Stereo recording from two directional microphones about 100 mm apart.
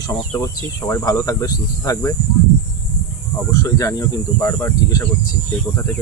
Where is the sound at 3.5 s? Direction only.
35° left (ahead or behind).